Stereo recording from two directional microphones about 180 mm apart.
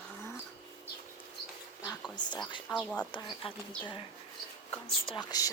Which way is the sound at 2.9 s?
25° left (ahead or behind).